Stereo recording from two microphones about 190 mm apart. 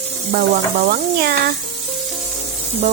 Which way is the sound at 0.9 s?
55° right (ahead or behind).